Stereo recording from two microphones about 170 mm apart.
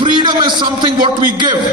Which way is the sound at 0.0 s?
30° right (ahead or behind).